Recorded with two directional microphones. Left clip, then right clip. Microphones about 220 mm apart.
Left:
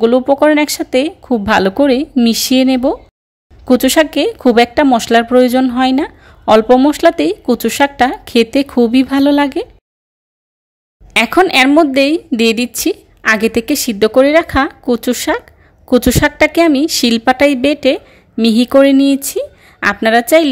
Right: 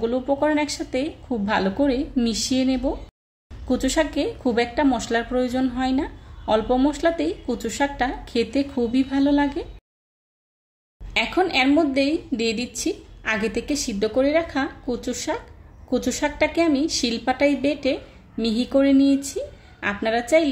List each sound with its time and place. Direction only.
0.0 s speech: 40° left (ahead or behind)
11.1 s a woman's voice: 45° left (ahead or behind)